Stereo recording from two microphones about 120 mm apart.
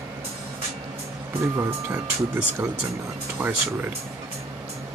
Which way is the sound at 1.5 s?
20° right (ahead or behind).